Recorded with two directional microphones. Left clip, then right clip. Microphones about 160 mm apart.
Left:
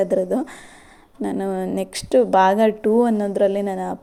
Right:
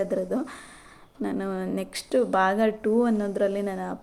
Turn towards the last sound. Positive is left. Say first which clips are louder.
# left 7 dB
turn(degrees=30)  # may be behind; listen again after turning